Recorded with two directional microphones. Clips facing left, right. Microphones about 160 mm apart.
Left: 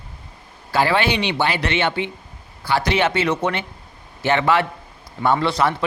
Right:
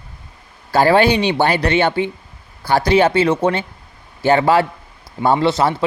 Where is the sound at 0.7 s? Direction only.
40° right (ahead or behind).